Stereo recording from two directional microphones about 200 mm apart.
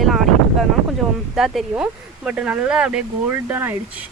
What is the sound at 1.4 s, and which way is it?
Speech, centre (ahead or behind).